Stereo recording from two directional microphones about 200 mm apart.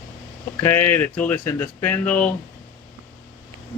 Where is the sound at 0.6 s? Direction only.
10° left (ahead or behind).